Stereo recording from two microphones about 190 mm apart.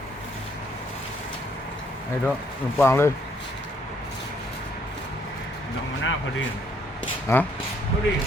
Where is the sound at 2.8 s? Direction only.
15° left (ahead or behind).